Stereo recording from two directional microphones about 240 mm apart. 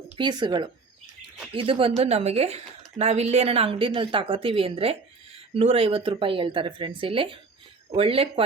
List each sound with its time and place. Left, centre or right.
0.2 s speech: centre